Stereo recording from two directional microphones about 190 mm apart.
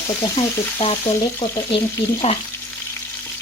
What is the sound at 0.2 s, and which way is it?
Speech, 25° left (ahead or behind).